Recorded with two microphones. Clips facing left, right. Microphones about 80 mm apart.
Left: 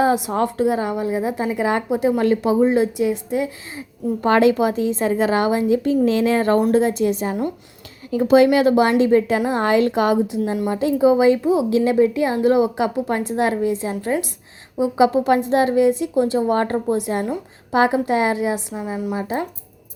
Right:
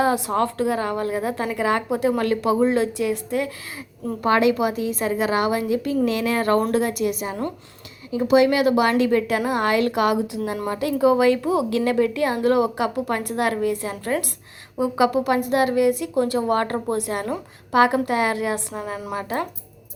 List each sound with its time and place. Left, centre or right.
0.0 s a woman's voice: centre
18.7 s a woman's voice: centre